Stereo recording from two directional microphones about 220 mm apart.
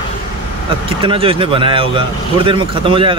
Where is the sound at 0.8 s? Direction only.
25° right (ahead or behind).